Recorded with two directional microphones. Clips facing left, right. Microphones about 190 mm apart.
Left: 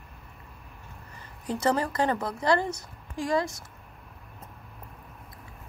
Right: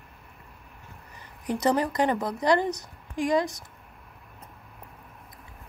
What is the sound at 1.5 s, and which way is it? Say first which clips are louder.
A woman's voice: right 2 dB; 15° right (ahead or behind).